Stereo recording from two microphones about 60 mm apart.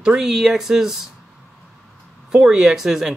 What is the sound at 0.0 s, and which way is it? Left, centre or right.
Speech, centre.